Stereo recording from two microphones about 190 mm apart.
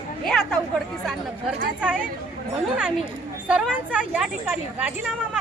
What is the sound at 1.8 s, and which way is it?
Speech, 5° right (ahead or behind).